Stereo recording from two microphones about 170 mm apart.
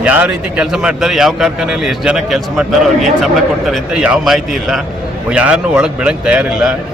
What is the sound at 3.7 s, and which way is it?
A man's voice, 5° right (ahead or behind).